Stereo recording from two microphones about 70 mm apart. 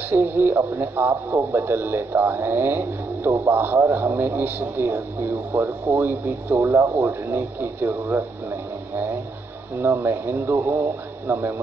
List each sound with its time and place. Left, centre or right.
0.1 s speech: right
9.8 s speech: right